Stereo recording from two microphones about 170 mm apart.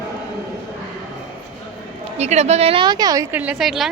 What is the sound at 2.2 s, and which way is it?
A woman's voice, 40° right (ahead or behind).